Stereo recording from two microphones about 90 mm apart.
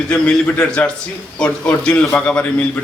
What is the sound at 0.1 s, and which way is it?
A man's voice, 15° left (ahead or behind).